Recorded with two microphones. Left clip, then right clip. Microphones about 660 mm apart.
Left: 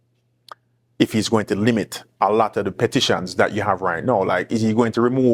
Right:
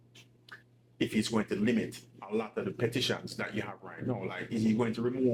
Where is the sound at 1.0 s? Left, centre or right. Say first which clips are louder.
Left 13 dB; left.